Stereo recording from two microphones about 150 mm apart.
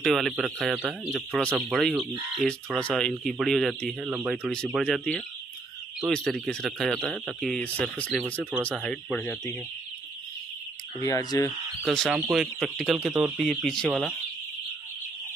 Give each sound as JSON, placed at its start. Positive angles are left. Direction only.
{"t": 0.0, "sound": "speech", "side_deg": 0}
{"t": 9.2, "sound": "speech", "side_deg": 15}
{"t": 11.1, "sound": "speech", "side_deg": 25}
{"t": 11.8, "sound": "speech", "side_deg": 0}